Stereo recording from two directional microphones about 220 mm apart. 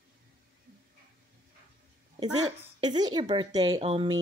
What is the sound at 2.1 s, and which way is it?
A woman's voice, 15° right (ahead or behind).